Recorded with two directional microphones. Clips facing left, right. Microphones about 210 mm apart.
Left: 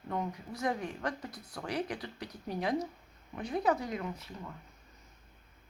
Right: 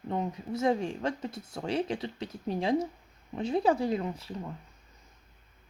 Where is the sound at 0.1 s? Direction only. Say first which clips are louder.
Right 4 dB; 25° right (ahead or behind).